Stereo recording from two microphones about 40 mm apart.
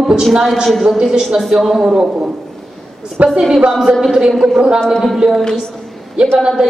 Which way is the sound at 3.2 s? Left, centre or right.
Right.